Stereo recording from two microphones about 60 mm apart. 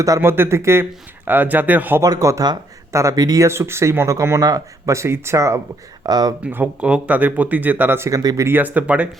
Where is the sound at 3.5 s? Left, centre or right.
Right.